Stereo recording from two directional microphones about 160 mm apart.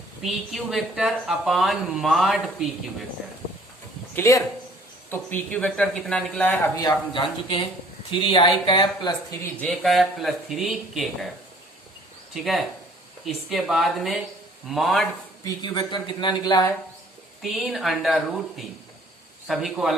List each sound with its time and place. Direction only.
0.3 s a woman's voice: centre (ahead or behind)
4.1 s speech: 20° left (ahead or behind)
6.7 s speech: 30° left (ahead or behind)
9.6 s a woman's voice: centre (ahead or behind)
12.3 s a woman's voice: centre (ahead or behind)
15.4 s speech: 25° left (ahead or behind)
17.4 s a woman's voice: centre (ahead or behind)